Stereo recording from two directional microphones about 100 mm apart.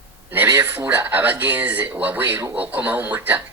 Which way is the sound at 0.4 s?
25° right (ahead or behind).